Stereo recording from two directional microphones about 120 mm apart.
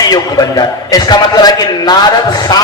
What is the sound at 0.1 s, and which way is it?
A man's voice, 30° left (ahead or behind).